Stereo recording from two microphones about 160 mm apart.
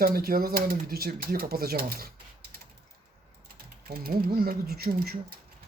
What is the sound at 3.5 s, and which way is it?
Speech, 70° right (ahead or behind).